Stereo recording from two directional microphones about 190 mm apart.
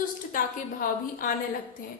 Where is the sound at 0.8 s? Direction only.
45° left (ahead or behind).